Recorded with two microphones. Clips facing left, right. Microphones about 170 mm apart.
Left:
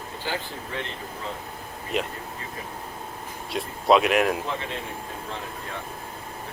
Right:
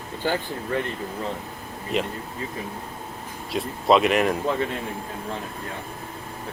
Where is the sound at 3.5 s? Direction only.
Centre (ahead or behind).